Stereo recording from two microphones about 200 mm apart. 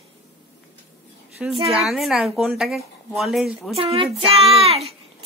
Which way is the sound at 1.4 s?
5° right (ahead or behind).